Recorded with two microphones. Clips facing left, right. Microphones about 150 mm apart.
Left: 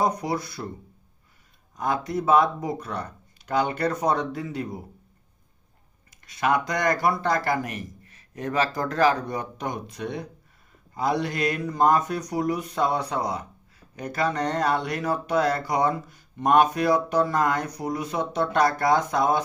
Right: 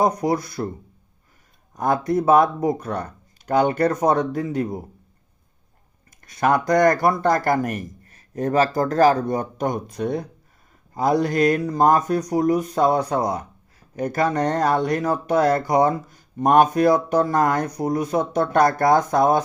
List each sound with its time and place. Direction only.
0.0 s speech: 45° right (ahead or behind)
1.7 s speech: 50° right (ahead or behind)
6.2 s speech: 45° right (ahead or behind)